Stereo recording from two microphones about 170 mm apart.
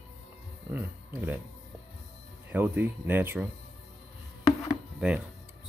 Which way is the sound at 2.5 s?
10° right (ahead or behind).